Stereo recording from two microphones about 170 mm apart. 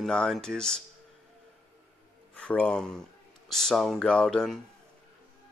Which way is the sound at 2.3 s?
10° left (ahead or behind).